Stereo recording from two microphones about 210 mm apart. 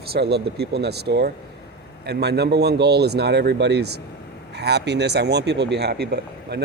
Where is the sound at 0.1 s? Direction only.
50° right (ahead or behind).